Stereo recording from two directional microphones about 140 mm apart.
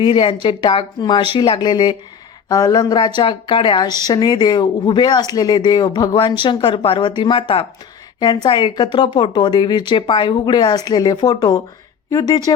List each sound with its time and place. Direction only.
0.0 s speech: 35° left (ahead or behind)